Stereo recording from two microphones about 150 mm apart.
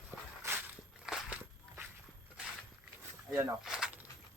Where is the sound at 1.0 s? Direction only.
5° right (ahead or behind).